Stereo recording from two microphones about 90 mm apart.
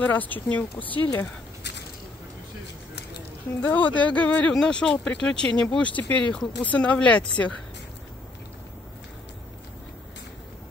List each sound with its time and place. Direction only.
0.0 s speech: 20° left (ahead or behind)
3.6 s speech: 15° left (ahead or behind)